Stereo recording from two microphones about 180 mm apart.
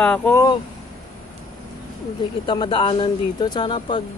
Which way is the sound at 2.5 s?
25° left (ahead or behind).